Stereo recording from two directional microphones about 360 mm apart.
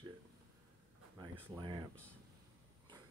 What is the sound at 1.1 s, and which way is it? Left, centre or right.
Speech, centre.